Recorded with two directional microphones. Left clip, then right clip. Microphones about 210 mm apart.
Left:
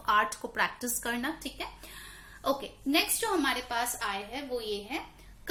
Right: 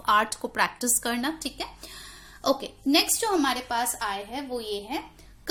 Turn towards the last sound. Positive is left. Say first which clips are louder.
# right 3 dB
turn(degrees=-50)  # may be behind; listen again after turning